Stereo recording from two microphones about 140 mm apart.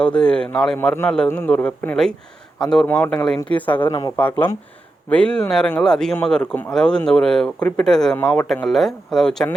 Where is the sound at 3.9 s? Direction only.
25° left (ahead or behind).